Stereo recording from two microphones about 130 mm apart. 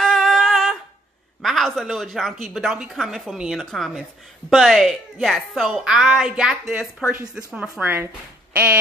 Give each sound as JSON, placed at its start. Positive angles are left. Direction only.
{"t": 0.0, "sound": "a sound", "side_deg": 5}
{"t": 1.4, "sound": "a woman's voice", "side_deg": 0}
{"t": 7.8, "sound": "speech", "side_deg": -15}